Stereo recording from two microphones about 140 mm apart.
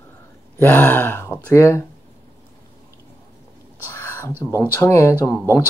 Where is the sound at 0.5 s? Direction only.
15° left (ahead or behind).